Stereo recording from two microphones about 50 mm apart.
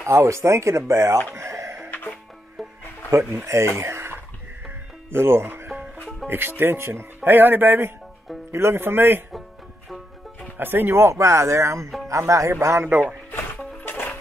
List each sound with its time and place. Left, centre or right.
0.0 s speech: right
1.3 s a sound: right
3.4 s speech: right
7.2 s speech: right
8.5 s speech: right
10.6 s speech: right
12.8 s speech: right
13.8 s music: left